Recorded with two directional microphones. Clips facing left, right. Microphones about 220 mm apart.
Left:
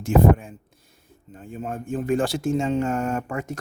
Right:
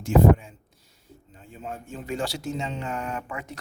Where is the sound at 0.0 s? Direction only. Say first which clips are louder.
Left 1 dB; 50° left (ahead or behind).